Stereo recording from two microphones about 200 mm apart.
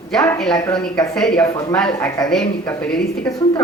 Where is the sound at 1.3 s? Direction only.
15° left (ahead or behind).